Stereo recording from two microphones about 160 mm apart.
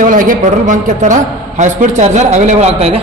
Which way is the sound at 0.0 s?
55° right (ahead or behind).